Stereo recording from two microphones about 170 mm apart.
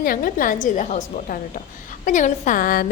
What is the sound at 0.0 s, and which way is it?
A woman's voice, 55° left (ahead or behind).